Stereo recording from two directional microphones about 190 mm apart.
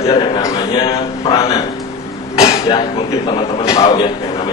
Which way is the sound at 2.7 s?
25° left (ahead or behind).